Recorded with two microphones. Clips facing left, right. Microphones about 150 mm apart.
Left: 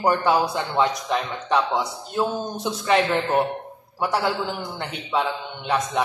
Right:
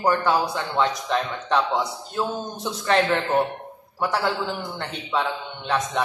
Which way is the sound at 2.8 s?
5° left (ahead or behind).